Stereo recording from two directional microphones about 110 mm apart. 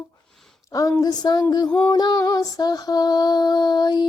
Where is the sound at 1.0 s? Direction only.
40° left (ahead or behind).